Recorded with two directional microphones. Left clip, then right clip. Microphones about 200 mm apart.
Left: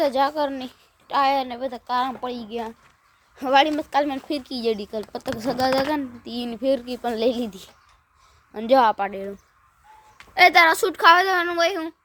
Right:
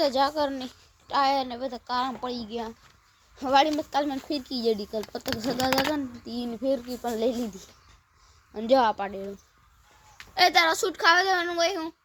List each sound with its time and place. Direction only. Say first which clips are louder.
0.0 s a woman's voice: left 3 dB; 5° left (ahead or behind)
4.9 s a child's voice: left 2 dB; 30° left (ahead or behind)
5.5 s speech: left 4 dB; 10° left (ahead or behind)
5.9 s a child's voice: left 4 dB; 40° left (ahead or behind)
8.5 s speech: left 5 dB; 10° left (ahead or behind)
10.3 s speech: left 6 dB; 15° left (ahead or behind)